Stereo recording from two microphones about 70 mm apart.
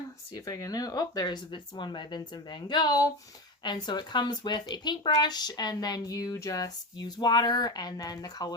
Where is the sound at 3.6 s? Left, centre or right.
Left.